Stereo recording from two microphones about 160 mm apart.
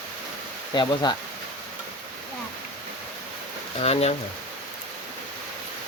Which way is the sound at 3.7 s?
40° left (ahead or behind).